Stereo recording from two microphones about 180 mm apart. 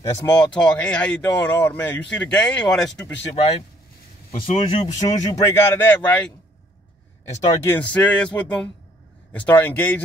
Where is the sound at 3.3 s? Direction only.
35° left (ahead or behind); by 6.2 s 10° left (ahead or behind).